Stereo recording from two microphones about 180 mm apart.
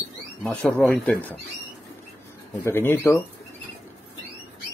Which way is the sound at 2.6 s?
15° left (ahead or behind).